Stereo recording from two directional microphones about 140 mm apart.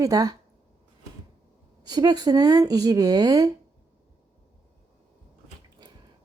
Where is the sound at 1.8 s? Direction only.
30° right (ahead or behind).